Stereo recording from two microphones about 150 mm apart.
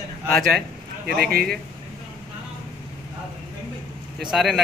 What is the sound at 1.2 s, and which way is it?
Speech, 90° right.